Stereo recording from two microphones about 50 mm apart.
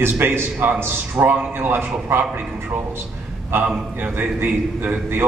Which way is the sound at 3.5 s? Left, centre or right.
Right.